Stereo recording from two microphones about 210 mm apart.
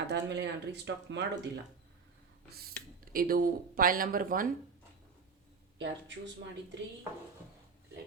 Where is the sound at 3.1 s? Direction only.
45° right (ahead or behind).